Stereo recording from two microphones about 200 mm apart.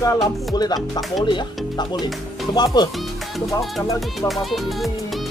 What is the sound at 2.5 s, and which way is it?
Music, 20° left (ahead or behind).